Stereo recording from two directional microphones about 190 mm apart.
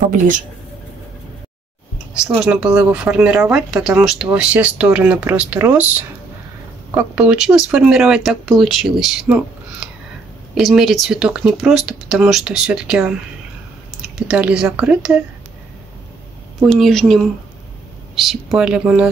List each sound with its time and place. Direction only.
2.3 s speech: 5° right (ahead or behind)
10.5 s speech: centre (ahead or behind)
14.2 s speech: 5° right (ahead or behind)
16.6 s speech: centre (ahead or behind)